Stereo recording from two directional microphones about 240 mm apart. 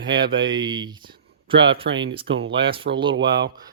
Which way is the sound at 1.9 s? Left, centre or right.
Right.